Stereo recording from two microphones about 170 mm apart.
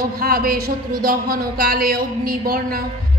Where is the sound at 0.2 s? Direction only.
60° right (ahead or behind).